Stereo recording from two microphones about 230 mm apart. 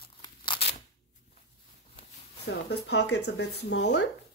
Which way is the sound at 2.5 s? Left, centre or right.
Left.